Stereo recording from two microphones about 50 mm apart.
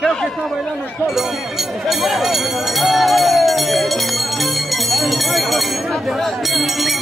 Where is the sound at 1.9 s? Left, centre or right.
Centre.